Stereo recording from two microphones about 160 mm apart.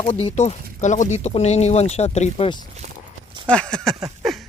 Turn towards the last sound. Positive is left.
turn(degrees=0)  # may be behind; listen again after turning